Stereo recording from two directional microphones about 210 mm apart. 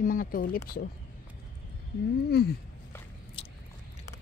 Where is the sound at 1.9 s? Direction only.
50° left (ahead or behind).